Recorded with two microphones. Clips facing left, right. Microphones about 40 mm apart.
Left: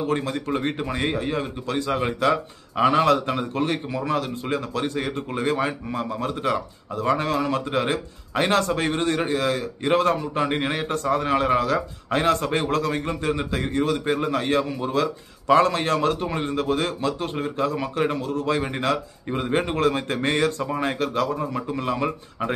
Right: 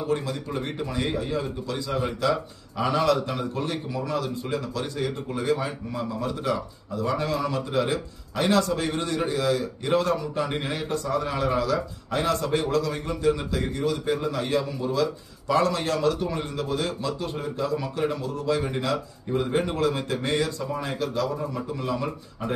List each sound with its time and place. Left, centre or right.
0.0 s a man's voice: left